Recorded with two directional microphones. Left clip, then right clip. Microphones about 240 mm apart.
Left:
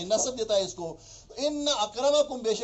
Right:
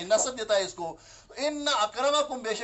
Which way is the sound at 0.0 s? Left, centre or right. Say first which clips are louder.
Right 1 dB; centre.